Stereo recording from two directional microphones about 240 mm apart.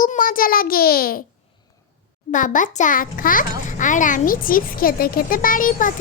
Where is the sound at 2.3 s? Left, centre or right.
Left.